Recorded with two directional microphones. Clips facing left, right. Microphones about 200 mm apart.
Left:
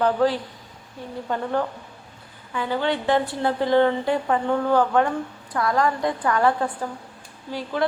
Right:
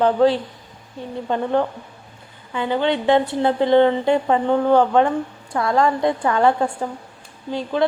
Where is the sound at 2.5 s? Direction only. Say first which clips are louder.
Right 4 dB; 20° right (ahead or behind).